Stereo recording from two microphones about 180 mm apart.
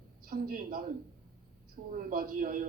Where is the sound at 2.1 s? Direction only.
55° right (ahead or behind).